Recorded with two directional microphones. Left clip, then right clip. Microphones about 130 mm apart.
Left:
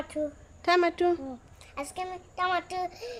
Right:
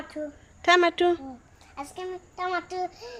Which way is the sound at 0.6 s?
10° left (ahead or behind).